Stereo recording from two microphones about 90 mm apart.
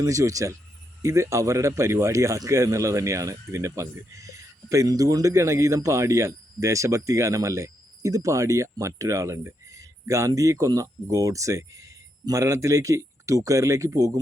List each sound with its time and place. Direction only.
0.0 s a man's voice: 40° right (ahead or behind)